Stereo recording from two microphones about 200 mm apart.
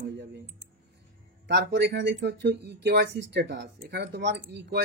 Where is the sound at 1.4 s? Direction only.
60° right (ahead or behind).